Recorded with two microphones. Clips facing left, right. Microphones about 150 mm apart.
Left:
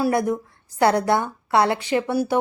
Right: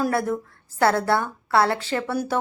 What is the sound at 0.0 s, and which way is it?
A woman's voice, 15° left (ahead or behind).